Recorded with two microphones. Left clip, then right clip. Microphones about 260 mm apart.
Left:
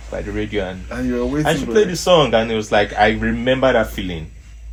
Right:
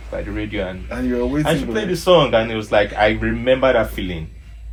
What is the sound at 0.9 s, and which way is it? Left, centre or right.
Speech, centre.